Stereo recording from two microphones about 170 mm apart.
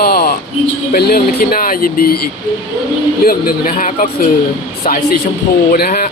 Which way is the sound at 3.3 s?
55° left (ahead or behind).